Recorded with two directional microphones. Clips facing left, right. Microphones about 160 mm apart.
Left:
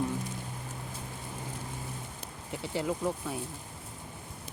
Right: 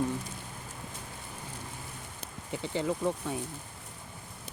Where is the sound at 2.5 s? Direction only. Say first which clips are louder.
Right 1 dB; 5° left (ahead or behind).